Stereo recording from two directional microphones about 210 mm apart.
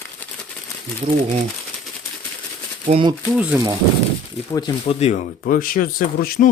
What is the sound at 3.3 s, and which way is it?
Speech, 15° right (ahead or behind).